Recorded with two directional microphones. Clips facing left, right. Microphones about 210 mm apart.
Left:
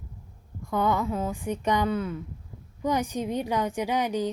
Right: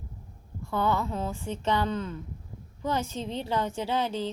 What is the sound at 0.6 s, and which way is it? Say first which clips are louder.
Speech: left 2 dB; 15° left (ahead or behind).